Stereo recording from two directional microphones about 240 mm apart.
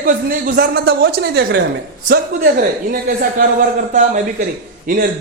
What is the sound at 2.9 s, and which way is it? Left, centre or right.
Speech, right.